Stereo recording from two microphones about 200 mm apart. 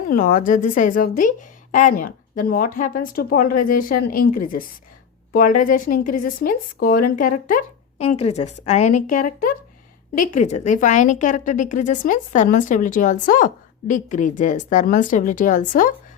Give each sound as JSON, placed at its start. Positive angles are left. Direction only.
{"t": 0.1, "sound": "a woman's voice", "side_deg": 45}